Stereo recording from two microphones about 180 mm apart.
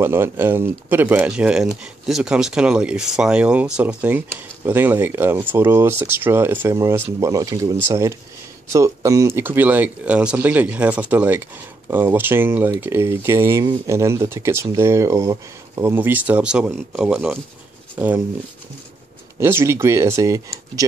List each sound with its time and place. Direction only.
0.0 s speech: 15° right (ahead or behind)
19.4 s speech: 15° right (ahead or behind)